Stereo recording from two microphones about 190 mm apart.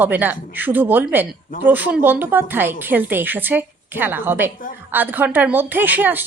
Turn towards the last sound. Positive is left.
turn(degrees=-10)  # may be behind; listen again after turning